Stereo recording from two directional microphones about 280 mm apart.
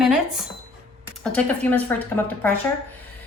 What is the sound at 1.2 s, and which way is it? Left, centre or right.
A woman's voice, centre.